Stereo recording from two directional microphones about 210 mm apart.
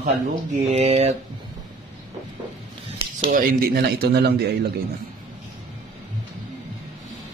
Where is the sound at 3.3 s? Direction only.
45° right (ahead or behind).